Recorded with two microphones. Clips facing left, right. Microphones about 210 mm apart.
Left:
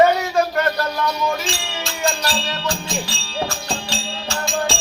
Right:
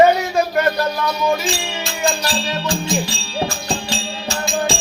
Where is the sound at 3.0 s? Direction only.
15° right (ahead or behind).